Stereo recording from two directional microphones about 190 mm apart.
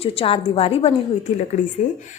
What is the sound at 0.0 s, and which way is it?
Speech, 30° left (ahead or behind).